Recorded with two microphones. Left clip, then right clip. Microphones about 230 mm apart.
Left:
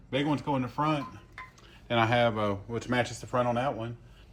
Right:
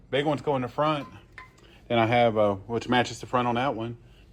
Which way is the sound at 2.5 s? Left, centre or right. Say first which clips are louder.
Right 6 dB; right.